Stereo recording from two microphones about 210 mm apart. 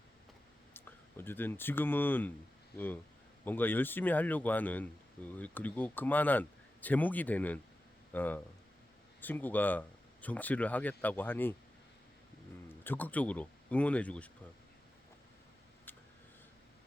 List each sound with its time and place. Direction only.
0.7 s speech: 10° left (ahead or behind)
12.6 s speech: 10° left (ahead or behind)
15.9 s a sound: 10° left (ahead or behind)